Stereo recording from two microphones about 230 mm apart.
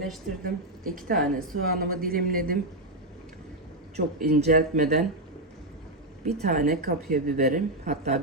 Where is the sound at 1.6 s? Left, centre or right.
Right.